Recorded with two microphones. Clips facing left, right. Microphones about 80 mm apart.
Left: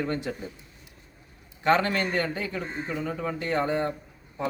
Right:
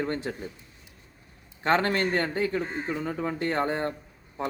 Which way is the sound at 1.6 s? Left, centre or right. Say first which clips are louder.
Left 1 dB; right.